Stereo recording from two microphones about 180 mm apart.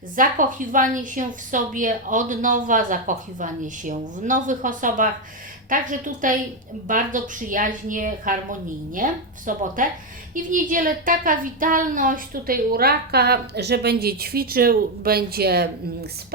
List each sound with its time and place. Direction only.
0.2 s a woman's voice: 45° right (ahead or behind); by 15.7 s 65° right (ahead or behind)